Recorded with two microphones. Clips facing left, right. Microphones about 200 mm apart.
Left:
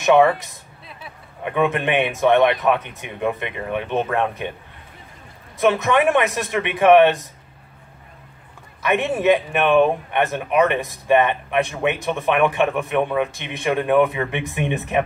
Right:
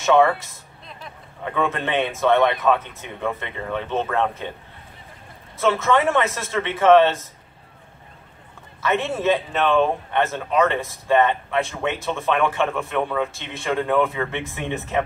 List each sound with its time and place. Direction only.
0.0 s speech: 15° left (ahead or behind)
5.6 s speech: 15° left (ahead or behind)
8.8 s speech: 15° left (ahead or behind)